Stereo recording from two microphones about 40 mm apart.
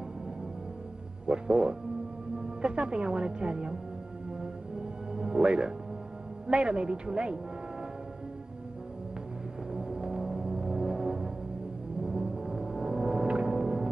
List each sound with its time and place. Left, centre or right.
1.2 s a woman's voice: right
5.1 s music: centre
6.4 s a woman's voice: right
9.7 s music: centre
12.0 s foghorn: centre